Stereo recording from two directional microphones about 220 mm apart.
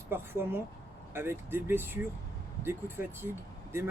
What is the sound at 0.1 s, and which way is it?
Speech, 10° right (ahead or behind).